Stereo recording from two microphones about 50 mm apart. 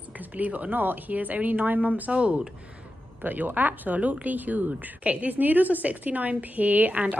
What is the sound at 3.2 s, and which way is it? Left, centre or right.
Speech, right.